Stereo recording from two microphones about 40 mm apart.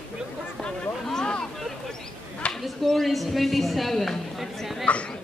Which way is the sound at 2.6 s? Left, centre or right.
Centre.